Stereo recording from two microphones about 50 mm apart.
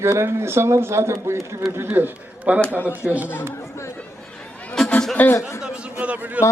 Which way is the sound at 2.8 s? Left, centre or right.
Left.